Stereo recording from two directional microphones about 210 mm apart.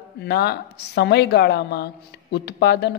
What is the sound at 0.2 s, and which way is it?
A man's voice, 50° left (ahead or behind).